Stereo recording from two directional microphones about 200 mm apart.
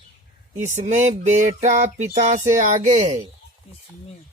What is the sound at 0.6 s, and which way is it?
Speech, 35° right (ahead or behind).